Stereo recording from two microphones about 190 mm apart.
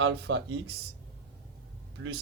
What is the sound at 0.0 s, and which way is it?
Speech, 70° right (ahead or behind).